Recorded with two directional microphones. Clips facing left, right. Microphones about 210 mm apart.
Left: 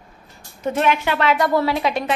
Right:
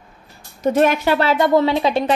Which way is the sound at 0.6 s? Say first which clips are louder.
Right 4 dB; 40° right (ahead or behind).